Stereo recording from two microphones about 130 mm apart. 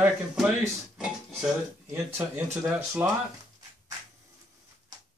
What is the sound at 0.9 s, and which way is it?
Dishes, 5° right (ahead or behind).